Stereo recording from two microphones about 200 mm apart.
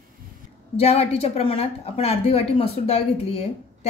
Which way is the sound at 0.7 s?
30° left (ahead or behind).